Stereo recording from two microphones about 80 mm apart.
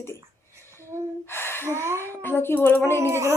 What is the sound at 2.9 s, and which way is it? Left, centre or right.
Speech, right.